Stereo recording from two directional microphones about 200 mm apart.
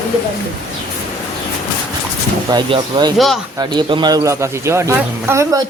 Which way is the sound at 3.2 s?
Centre (ahead or behind).